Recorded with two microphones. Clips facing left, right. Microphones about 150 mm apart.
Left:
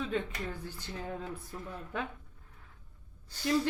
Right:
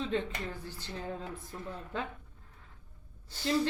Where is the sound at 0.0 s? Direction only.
20° right (ahead or behind).